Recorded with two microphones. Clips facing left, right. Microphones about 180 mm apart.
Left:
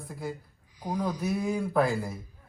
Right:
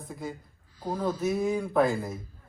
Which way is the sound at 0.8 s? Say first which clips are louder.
Right 1 dB; 15° left (ahead or behind).